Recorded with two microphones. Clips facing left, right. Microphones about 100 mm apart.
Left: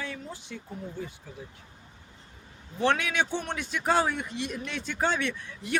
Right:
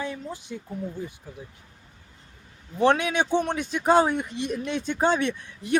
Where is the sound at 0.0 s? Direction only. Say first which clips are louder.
Right 5 dB; 20° right (ahead or behind).